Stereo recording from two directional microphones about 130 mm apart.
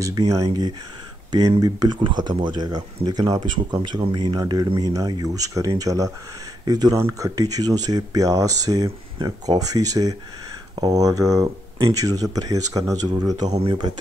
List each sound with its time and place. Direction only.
0.0 s speech: 30° right (ahead or behind)